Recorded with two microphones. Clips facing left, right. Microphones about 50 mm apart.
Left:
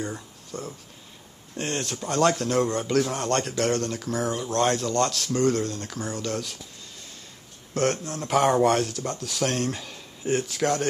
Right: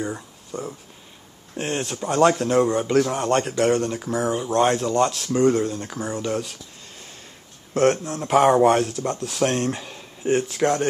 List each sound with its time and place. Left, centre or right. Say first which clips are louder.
0.0 s speech: right 4 dB; centre
7.7 s speech: right 6 dB; centre
9.2 s speech: right 4 dB; right